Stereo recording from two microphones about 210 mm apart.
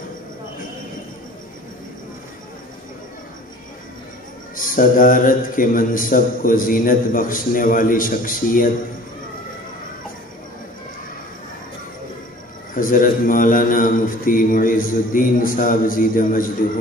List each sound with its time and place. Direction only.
4.6 s a man's voice: 40° left (ahead or behind)
12.7 s a man's voice: 40° left (ahead or behind)